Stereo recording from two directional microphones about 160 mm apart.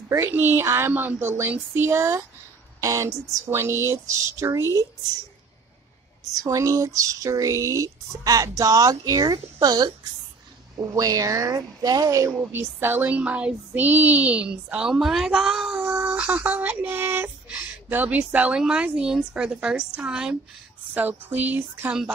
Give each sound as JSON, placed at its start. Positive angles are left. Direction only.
{"t": 0.1, "sound": "speech", "side_deg": -15}
{"t": 6.4, "sound": "speech", "side_deg": -20}